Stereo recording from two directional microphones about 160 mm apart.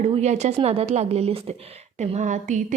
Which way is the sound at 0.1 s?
45° right (ahead or behind).